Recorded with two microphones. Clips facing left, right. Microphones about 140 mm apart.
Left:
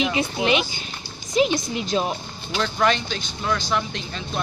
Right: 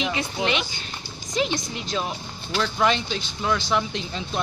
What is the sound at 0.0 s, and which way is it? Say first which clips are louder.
A woman's voice: left 3 dB; 15° left (ahead or behind).